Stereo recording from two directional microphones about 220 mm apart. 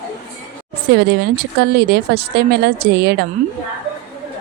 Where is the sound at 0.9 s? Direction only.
50° right (ahead or behind).